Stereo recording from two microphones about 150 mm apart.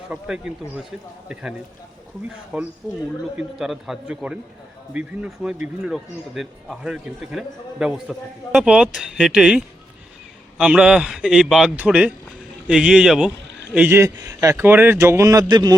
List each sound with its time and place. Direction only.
0.1 s a man's voice: 5° right (ahead or behind)
13.7 s a man's voice: 15° right (ahead or behind)